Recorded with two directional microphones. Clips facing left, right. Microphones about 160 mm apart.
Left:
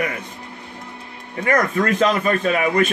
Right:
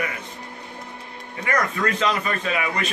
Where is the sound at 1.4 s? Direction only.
45° left (ahead or behind).